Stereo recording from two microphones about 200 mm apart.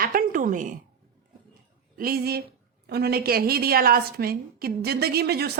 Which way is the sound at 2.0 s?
50° right (ahead or behind).